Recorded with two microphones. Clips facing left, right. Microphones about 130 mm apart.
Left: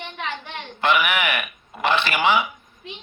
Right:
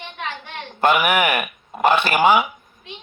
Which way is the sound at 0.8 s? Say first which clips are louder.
Right 4 dB; 45° right (ahead or behind).